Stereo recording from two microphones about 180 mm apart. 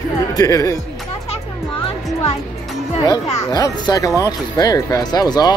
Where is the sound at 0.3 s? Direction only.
20° left (ahead or behind).